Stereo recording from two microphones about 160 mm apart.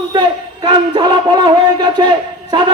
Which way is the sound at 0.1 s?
25° right (ahead or behind).